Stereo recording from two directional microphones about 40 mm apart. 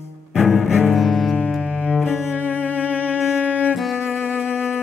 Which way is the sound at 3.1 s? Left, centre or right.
Right.